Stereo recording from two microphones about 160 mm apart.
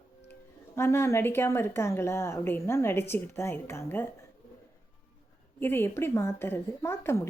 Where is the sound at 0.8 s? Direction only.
15° left (ahead or behind).